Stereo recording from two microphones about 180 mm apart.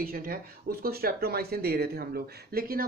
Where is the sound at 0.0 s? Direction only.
55° right (ahead or behind).